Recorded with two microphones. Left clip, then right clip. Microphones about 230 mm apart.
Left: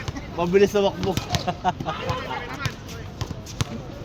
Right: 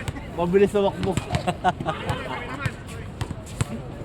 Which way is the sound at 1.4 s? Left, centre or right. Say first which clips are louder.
Right 3 dB; right.